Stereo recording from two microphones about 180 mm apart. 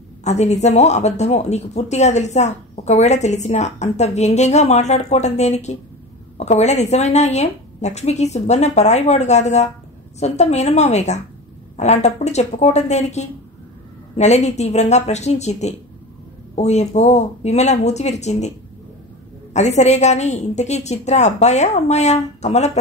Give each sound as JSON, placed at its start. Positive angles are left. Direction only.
{"t": 0.2, "sound": "speech", "side_deg": 40}
{"t": 19.5, "sound": "speech", "side_deg": 40}